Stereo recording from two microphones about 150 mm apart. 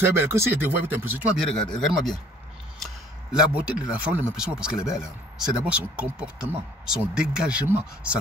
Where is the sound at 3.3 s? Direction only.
5° right (ahead or behind).